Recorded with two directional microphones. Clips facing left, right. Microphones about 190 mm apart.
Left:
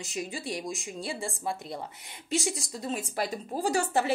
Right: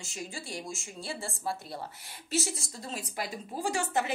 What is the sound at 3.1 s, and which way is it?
A woman's voice, 40° left (ahead or behind).